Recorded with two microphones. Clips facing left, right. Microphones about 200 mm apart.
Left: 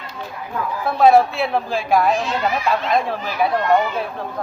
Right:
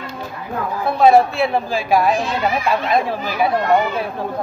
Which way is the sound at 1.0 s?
Centre (ahead or behind).